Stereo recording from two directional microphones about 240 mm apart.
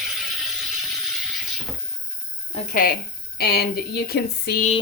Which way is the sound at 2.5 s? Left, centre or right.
Left.